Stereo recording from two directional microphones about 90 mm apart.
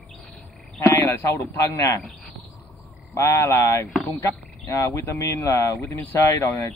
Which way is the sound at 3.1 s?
35° left (ahead or behind).